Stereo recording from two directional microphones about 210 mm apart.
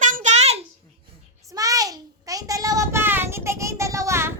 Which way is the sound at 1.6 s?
15° right (ahead or behind).